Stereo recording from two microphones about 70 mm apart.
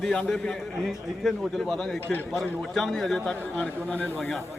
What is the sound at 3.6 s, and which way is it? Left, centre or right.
Speech, left.